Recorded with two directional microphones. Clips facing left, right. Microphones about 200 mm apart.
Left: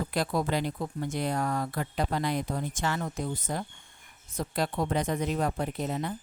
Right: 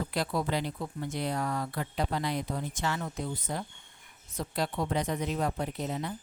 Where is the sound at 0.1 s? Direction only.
45° left (ahead or behind).